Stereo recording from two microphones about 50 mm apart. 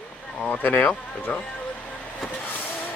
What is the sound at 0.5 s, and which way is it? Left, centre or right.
Speech, left.